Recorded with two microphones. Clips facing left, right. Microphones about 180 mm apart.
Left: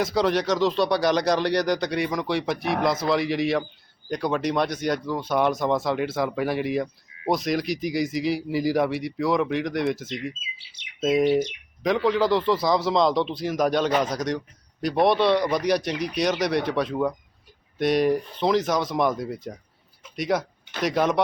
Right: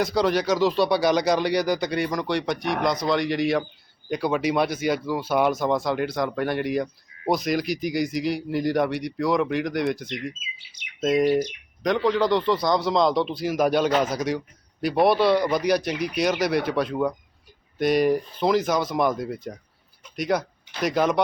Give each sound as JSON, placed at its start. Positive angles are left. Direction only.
{"t": 0.0, "sound": "speech", "side_deg": 0}